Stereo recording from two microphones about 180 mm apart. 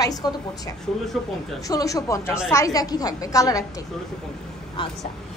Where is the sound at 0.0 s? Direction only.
20° left (ahead or behind).